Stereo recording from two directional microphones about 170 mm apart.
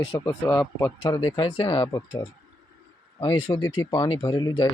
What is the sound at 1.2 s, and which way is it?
Speech, 30° left (ahead or behind).